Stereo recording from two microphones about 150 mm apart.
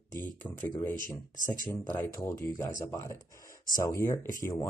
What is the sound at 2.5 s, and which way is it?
Speech, 20° left (ahead or behind).